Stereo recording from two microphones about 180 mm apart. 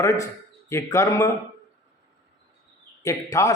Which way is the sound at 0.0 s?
15° left (ahead or behind).